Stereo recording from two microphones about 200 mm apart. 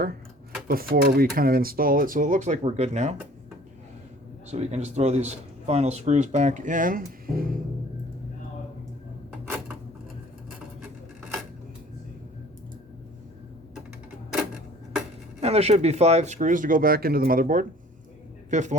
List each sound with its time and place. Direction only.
0.7 s speech: 50° right (ahead or behind)
4.5 s speech: 35° right (ahead or behind)
15.4 s speech: 30° right (ahead or behind)